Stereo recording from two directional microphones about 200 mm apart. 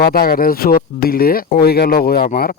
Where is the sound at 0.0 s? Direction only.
50° left (ahead or behind).